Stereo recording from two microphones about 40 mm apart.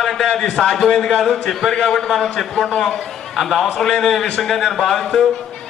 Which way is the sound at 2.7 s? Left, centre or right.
Left.